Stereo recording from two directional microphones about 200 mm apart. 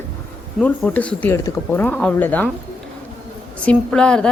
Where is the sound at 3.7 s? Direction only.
5° left (ahead or behind).